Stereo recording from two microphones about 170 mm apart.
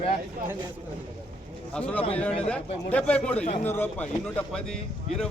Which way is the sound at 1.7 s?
5° left (ahead or behind).